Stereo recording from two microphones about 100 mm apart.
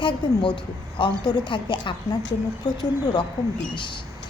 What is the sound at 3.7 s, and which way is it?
Speech, 55° left (ahead or behind).